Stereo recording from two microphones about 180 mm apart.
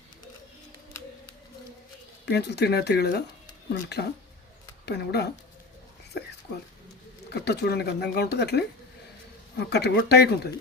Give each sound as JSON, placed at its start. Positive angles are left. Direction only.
{"t": 2.2, "sound": "speech", "side_deg": 70}
{"t": 7.4, "sound": "speech", "side_deg": 65}